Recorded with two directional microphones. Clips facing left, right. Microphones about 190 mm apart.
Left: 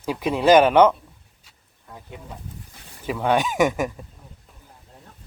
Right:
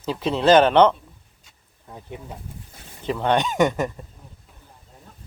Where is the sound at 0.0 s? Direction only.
10° left (ahead or behind).